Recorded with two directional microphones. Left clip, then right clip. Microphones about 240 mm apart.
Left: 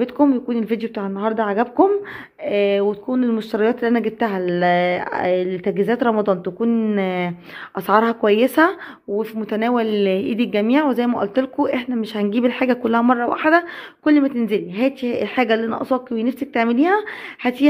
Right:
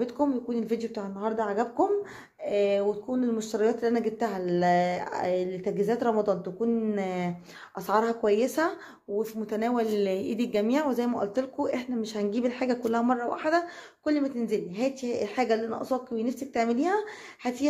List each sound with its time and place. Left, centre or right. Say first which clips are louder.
0.0 s speech: left 10 dB; left